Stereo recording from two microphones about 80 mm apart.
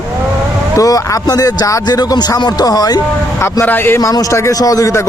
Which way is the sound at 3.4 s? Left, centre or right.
Left.